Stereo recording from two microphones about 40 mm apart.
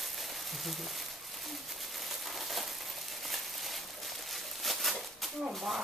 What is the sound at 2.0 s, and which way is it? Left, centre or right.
Crushing, centre.